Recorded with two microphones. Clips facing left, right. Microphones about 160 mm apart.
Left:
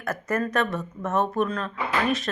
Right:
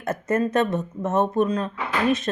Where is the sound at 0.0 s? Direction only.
25° right (ahead or behind).